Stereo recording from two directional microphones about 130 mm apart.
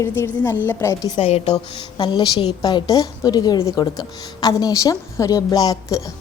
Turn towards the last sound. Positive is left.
turn(degrees=30)  # may be behind; listen again after turning